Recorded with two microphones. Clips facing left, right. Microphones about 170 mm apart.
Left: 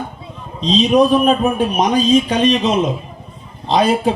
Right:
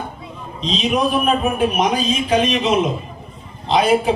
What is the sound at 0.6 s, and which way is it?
A man's voice, 35° left (ahead or behind).